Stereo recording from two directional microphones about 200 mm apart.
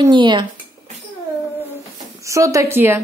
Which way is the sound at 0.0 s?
25° right (ahead or behind).